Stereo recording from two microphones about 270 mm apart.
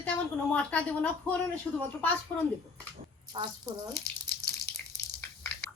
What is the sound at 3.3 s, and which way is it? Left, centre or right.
Speech, centre.